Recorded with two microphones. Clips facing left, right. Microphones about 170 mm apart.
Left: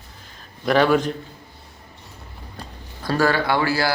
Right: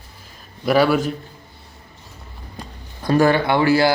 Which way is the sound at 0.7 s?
10° right (ahead or behind).